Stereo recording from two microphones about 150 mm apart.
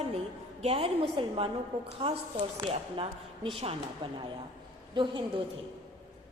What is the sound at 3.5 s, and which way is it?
A woman's voice, 40° right (ahead or behind).